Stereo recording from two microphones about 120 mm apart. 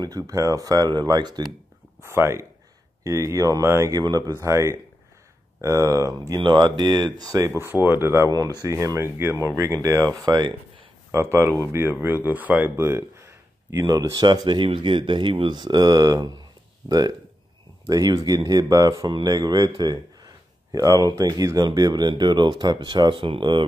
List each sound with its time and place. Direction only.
0.0 s speech: 30° right (ahead or behind)
2.0 s speech: 20° right (ahead or behind)
6.4 s speech: 40° right (ahead or behind)
11.1 s speech: 20° right (ahead or behind)
17.8 s speech: 30° right (ahead or behind)